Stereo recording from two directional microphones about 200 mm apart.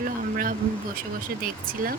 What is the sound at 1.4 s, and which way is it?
Speech, 45° right (ahead or behind).